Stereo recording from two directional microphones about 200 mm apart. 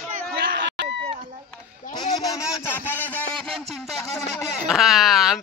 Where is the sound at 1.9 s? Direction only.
20° left (ahead or behind); by 4.0 s centre (ahead or behind).